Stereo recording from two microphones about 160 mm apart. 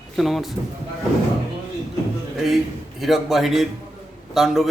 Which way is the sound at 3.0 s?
Centre (ahead or behind).